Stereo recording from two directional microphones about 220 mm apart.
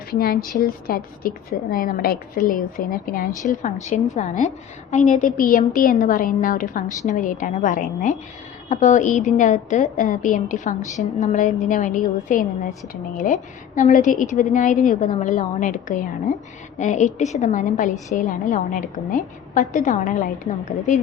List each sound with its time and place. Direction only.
0.1 s a woman's voice: 40° left (ahead or behind)